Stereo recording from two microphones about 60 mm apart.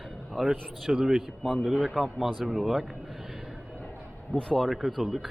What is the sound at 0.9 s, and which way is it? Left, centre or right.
Speech, centre.